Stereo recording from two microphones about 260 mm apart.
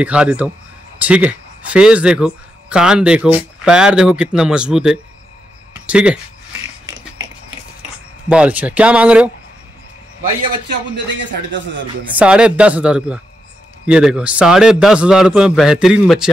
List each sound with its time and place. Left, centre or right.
0.0 s speech: centre
8.3 s speech: centre
11.1 s speech: right
12.2 s speech: centre